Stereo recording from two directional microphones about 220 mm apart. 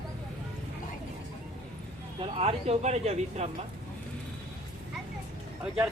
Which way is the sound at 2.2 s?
30° right (ahead or behind).